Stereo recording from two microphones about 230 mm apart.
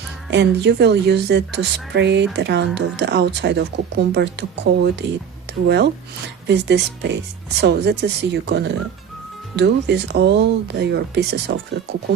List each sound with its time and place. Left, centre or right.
0.3 s speech: right